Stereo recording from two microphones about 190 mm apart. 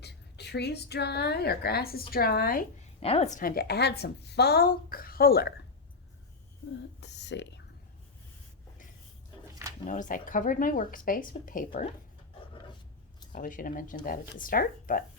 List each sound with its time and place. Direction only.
0.0 s a woman's voice: 60° left (ahead or behind)
3.0 s a woman's voice: 30° left (ahead or behind); by 5.5 s 55° left (ahead or behind)
7.0 s whispering: 65° left (ahead or behind)
9.8 s a woman's voice: 40° left (ahead or behind)
13.3 s a woman's voice: 45° left (ahead or behind)